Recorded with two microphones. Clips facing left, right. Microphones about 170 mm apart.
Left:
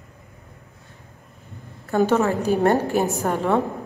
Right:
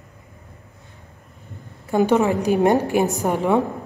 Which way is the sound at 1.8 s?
15° right (ahead or behind).